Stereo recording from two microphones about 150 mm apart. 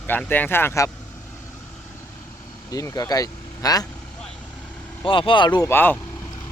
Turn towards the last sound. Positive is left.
turn(degrees=15)  # may be behind; listen again after turning